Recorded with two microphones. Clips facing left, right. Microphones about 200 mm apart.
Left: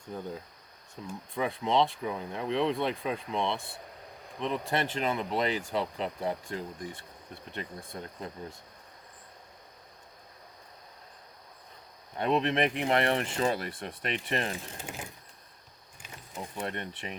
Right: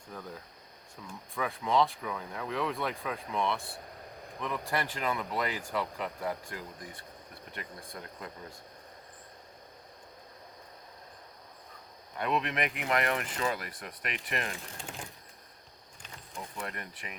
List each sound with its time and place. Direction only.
0.1 s speech: 25° left (ahead or behind)
12.1 s speech: 30° left (ahead or behind)
14.8 s a sound: 5° left (ahead or behind)
16.4 s speech: 30° left (ahead or behind)